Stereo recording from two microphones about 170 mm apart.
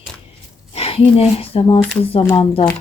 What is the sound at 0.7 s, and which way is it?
Speech, 35° left (ahead or behind).